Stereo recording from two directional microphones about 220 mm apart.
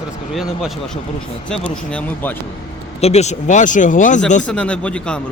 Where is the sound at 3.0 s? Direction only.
30° left (ahead or behind).